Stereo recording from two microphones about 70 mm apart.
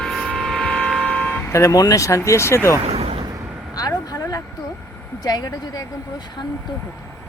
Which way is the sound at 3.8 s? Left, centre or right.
Left.